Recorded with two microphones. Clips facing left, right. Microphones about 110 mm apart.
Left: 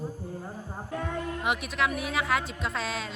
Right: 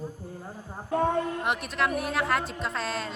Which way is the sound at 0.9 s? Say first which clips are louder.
Right 8 dB; 40° right (ahead or behind).